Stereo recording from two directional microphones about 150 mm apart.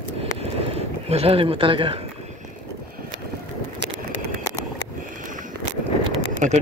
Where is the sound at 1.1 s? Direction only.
40° right (ahead or behind).